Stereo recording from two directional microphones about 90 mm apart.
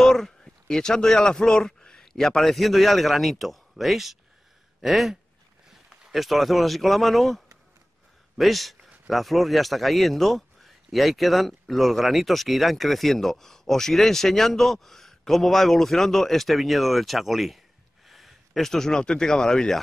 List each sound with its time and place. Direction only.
0.0 s a man's voice: 5° left (ahead or behind)